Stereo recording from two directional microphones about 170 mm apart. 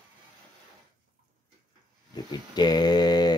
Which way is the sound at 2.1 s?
25° left (ahead or behind).